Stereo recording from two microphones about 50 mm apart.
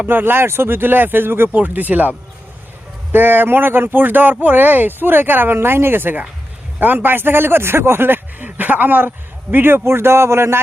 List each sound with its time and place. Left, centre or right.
0.1 s speech: right
1.5 s speech: right